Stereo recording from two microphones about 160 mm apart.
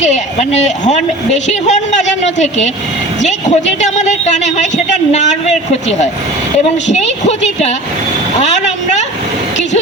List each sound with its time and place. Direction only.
0.0 s a woman's voice: 45° left (ahead or behind)
6.8 s a woman's voice: 45° left (ahead or behind)
8.4 s vehicle: 45° left (ahead or behind)